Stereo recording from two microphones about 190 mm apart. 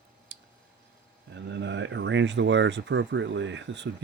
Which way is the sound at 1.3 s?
70° right (ahead or behind).